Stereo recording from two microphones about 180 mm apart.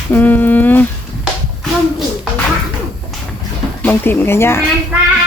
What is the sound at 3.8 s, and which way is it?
Speech, 10° left (ahead or behind).